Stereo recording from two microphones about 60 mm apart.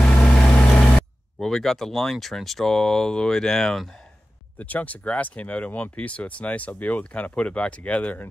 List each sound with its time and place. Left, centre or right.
0.0 s vehicle: centre
1.4 s speech: centre
4.6 s speech: left